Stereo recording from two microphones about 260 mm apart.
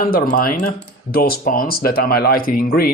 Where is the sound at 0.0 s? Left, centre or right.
Left.